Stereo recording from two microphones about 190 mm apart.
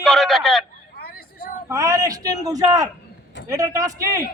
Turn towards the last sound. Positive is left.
turn(degrees=-15)  # may be behind; listen again after turning